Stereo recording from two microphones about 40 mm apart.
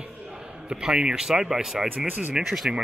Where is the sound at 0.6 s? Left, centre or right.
Right.